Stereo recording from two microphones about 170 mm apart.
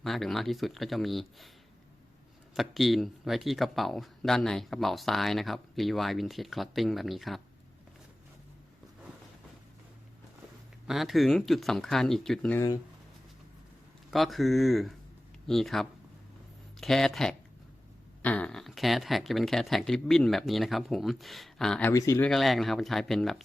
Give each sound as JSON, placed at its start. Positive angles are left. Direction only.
{"t": 0.0, "sound": "speech", "side_deg": 0}
{"t": 2.6, "sound": "speech", "side_deg": 0}
{"t": 10.8, "sound": "speech", "side_deg": 0}
{"t": 14.1, "sound": "speech", "side_deg": 0}
{"t": 21.9, "sound": "speech", "side_deg": 20}
{"t": 22.3, "sound": "speech", "side_deg": 0}